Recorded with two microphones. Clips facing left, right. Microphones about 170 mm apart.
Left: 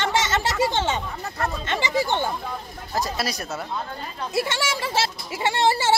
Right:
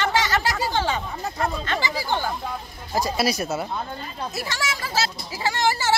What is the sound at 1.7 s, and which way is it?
Speech, 20° left (ahead or behind).